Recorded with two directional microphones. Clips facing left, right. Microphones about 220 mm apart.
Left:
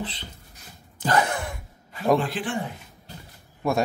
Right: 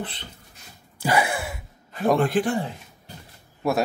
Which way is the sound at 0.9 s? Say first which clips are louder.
Even; 10° right (ahead or behind).